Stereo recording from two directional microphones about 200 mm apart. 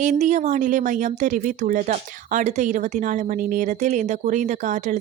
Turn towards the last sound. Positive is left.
turn(degrees=-35)  # may be behind; listen again after turning